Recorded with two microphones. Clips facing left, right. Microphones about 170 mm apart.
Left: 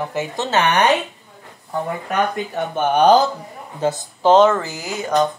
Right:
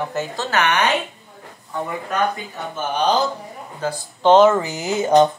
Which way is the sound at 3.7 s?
25° left (ahead or behind).